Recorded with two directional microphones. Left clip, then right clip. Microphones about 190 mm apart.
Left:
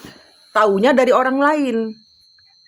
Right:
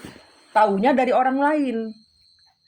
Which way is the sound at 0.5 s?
35° left (ahead or behind).